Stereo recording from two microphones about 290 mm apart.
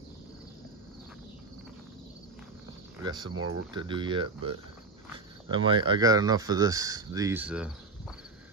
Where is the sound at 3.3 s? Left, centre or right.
Right.